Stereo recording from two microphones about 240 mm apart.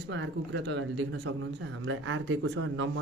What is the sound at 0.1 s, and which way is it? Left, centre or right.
Speech, right.